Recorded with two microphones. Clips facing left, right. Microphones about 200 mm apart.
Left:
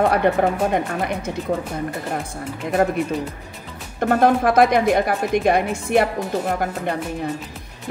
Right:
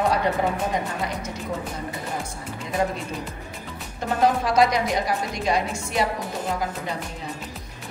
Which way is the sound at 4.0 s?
60° left (ahead or behind).